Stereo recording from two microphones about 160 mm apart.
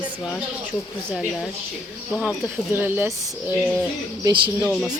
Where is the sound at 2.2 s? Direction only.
10° right (ahead or behind).